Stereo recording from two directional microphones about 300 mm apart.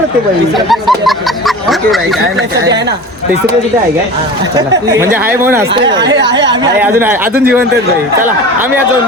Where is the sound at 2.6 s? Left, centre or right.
Right.